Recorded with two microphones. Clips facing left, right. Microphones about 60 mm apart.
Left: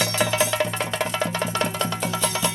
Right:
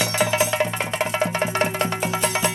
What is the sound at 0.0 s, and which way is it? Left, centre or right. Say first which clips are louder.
Music: right 1 dB; right.